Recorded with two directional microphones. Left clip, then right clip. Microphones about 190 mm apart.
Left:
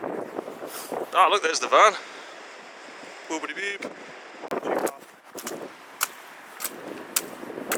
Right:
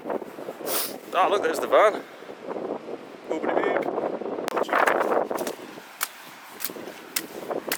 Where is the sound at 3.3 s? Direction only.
20° right (ahead or behind).